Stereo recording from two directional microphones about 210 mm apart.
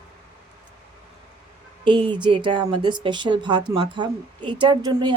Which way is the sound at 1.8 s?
20° right (ahead or behind).